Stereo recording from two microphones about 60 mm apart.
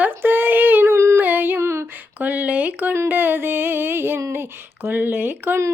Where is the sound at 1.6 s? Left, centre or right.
Right.